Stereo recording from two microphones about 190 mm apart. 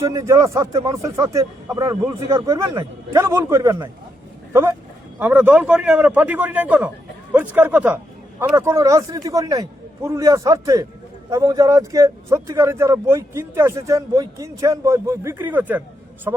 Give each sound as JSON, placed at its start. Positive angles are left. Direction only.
{"t": 0.0, "sound": "speech", "side_deg": -15}
{"t": 5.2, "sound": "speech", "side_deg": -10}